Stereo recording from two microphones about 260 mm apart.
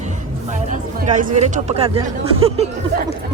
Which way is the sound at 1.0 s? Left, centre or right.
Right.